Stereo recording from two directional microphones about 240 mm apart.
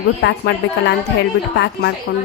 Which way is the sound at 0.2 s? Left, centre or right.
Left.